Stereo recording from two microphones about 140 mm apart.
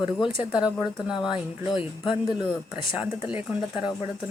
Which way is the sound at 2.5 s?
40° left (ahead or behind).